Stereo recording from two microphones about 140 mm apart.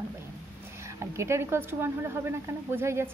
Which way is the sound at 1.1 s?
20° right (ahead or behind).